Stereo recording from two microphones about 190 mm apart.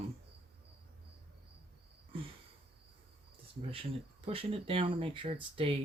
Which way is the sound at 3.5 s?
30° right (ahead or behind).